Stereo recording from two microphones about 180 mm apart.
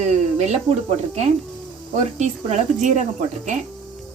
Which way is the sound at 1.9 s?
40° right (ahead or behind).